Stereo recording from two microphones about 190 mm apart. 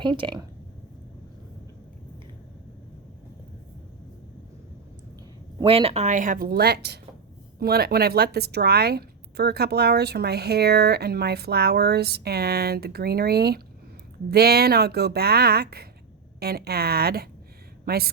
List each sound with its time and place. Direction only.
0.0 s speech: 25° right (ahead or behind)
5.6 s a woman's voice: 30° right (ahead or behind); by 18.1 s 55° right (ahead or behind)